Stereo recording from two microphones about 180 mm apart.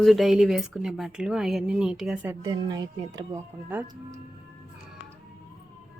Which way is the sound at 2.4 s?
25° right (ahead or behind).